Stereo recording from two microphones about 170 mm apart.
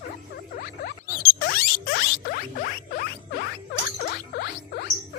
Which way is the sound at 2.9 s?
75° left (ahead or behind).